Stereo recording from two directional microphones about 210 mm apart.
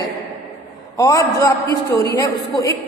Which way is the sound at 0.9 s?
15° left (ahead or behind).